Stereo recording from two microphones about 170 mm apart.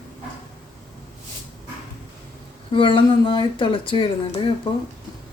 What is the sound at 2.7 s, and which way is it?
Speech, 30° left (ahead or behind).